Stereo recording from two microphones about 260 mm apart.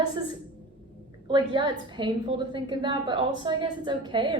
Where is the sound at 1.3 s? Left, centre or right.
Centre.